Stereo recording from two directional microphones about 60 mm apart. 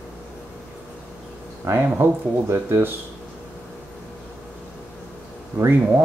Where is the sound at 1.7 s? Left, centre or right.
Right.